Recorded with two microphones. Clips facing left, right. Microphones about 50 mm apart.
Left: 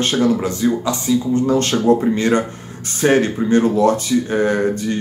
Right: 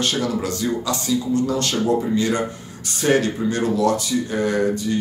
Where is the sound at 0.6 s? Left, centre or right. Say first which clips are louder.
Left 5 dB; left.